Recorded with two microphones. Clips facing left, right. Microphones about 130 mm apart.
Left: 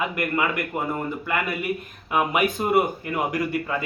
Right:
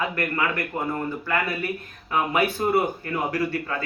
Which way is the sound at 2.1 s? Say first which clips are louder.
Left 1 dB; 15° left (ahead or behind).